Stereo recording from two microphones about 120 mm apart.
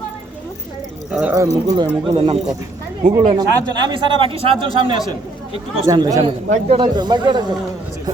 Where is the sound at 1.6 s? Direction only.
35° right (ahead or behind).